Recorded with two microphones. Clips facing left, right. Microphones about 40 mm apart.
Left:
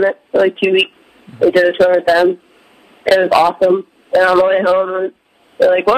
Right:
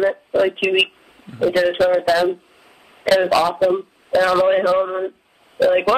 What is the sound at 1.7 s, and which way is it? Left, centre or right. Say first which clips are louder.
Speech: left 5 dB; centre.